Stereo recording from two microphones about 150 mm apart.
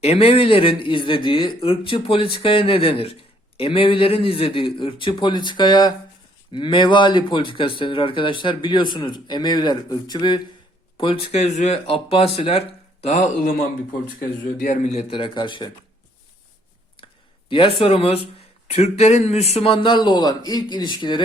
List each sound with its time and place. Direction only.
0.0 s a man's voice: 40° left (ahead or behind); by 14.8 s 60° left (ahead or behind)
14.9 s speech: 40° left (ahead or behind)
17.5 s speech: 35° left (ahead or behind)